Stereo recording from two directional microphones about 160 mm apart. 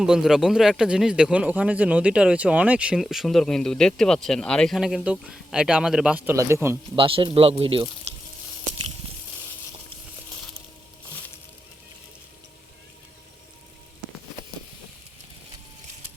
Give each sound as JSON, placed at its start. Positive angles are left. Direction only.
{"t": 0.0, "sound": "a man's voice", "side_deg": -5}
{"t": 6.9, "sound": "a man's voice", "side_deg": -30}